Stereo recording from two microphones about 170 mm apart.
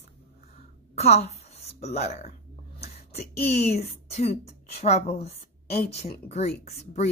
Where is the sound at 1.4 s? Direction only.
40° left (ahead or behind).